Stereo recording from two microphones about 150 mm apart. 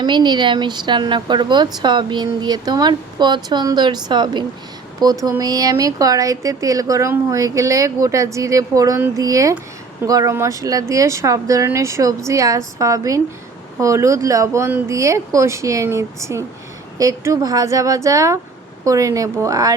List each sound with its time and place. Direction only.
0.0 s speech: 30° right (ahead or behind)